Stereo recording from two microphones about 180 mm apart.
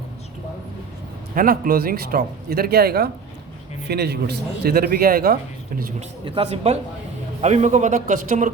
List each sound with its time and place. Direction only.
1.4 s speech: 55° right (ahead or behind)
6.2 s a man's voice: 30° right (ahead or behind); by 8.5 s 45° right (ahead or behind)